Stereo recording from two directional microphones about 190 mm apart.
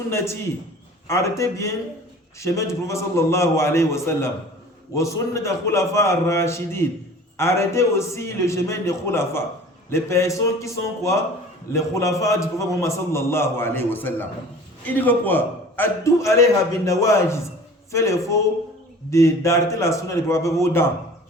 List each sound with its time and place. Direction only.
0.1 s a man's voice: 15° left (ahead or behind)